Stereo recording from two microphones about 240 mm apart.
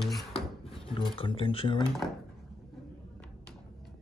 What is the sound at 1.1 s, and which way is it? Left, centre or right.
Speech, left.